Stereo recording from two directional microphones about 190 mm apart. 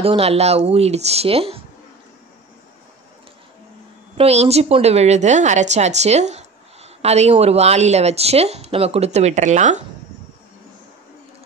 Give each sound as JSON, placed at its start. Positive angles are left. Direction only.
{"t": 0.0, "sound": "speech", "side_deg": -30}
{"t": 4.2, "sound": "speech", "side_deg": -35}